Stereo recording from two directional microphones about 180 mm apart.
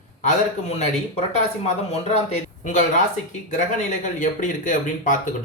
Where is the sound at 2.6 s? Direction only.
45° left (ahead or behind).